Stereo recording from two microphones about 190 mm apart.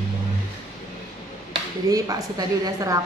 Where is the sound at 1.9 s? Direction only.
20° right (ahead or behind).